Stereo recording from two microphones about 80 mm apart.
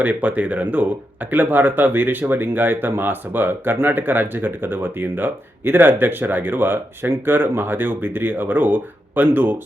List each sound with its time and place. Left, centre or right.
0.0 s speech: centre